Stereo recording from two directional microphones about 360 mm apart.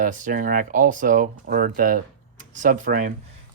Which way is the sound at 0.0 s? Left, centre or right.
Right.